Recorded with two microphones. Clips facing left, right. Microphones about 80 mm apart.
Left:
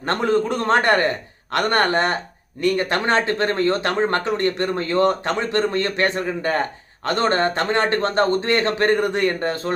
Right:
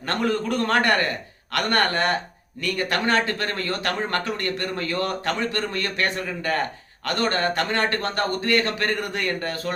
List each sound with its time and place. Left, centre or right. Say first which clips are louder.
0.1 s speech: left 4 dB; left